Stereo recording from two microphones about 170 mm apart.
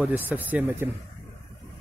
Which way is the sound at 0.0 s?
10° right (ahead or behind).